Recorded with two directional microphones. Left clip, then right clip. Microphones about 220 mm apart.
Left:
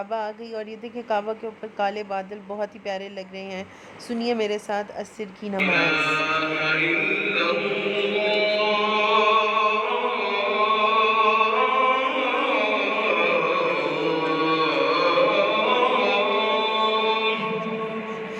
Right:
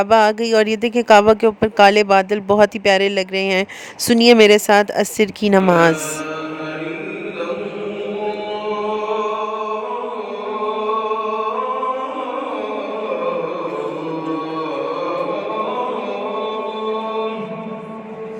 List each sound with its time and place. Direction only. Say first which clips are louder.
0.1 s speech: right 16 dB; 50° right (ahead or behind)